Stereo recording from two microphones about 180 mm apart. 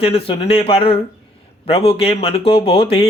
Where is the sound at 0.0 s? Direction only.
30° left (ahead or behind).